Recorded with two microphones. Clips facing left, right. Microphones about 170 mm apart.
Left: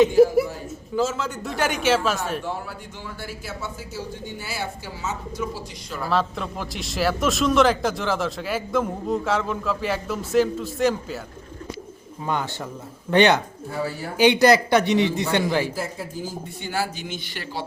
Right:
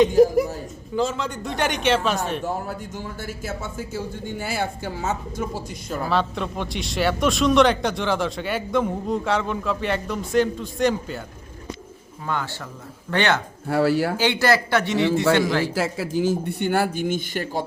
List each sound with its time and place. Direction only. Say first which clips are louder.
0.9 s a man's voice: even; 5° left (ahead or behind)
2.4 s speech: right 3 dB; 45° right (ahead or behind)
6.1 s a man's voice: even; centre (ahead or behind)
12.2 s a man's voice: left 2 dB; 20° left (ahead or behind)
13.7 s speech: right 10 dB; 80° right
14.2 s a man's voice: left 4 dB; 15° left (ahead or behind)
15.7 s a man's voice: right 6 dB; 90° right; by 17.7 s 45° right (ahead or behind)